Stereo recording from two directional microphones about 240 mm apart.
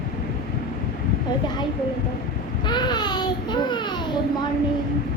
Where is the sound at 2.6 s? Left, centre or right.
Centre.